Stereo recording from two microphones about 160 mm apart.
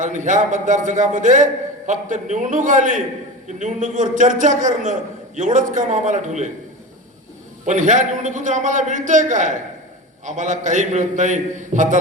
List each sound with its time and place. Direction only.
0.0 s a man's voice: 50° right (ahead or behind)
7.6 s a man's voice: 50° right (ahead or behind)